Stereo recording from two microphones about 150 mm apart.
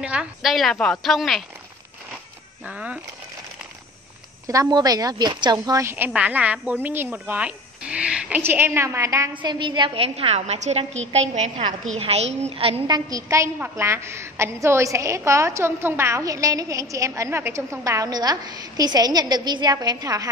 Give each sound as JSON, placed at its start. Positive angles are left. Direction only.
{"t": 0.0, "sound": "a woman's voice", "side_deg": -5}
{"t": 2.6, "sound": "a woman's voice", "side_deg": -10}
{"t": 4.5, "sound": "a woman's voice", "side_deg": -25}
{"t": 9.4, "sound": "a woman's voice", "side_deg": -30}
{"t": 12.8, "sound": "a woman's voice", "side_deg": -25}